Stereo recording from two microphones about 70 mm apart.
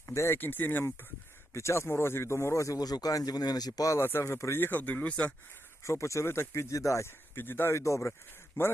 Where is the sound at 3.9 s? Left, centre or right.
Left.